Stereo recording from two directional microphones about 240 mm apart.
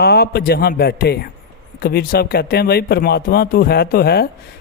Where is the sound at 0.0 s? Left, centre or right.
Left.